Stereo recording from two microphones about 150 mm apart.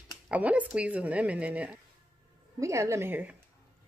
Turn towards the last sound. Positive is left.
turn(degrees=-10)  # may be behind; listen again after turning